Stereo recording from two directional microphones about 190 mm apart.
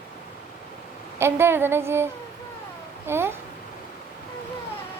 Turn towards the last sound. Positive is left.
turn(degrees=-10)  # may be behind; listen again after turning